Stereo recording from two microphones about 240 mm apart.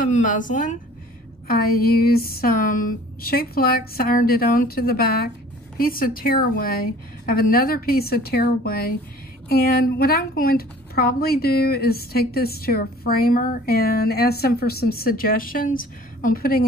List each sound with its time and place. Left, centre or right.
0.0 s a woman's voice: left